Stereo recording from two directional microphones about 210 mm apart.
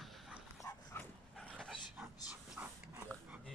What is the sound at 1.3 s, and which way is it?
Dog, centre (ahead or behind).